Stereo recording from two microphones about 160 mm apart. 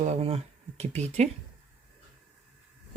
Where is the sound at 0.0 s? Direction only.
40° right (ahead or behind).